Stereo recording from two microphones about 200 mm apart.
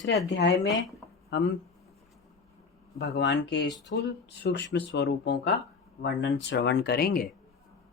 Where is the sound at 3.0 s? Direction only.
60° left (ahead or behind).